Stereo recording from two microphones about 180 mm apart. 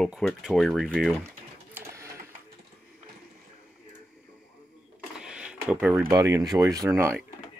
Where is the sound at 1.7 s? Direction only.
15° right (ahead or behind).